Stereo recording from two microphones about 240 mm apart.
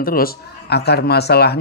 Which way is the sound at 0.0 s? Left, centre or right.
Left.